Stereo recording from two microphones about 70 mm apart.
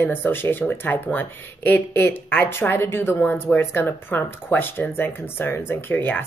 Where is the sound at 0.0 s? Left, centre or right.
Left.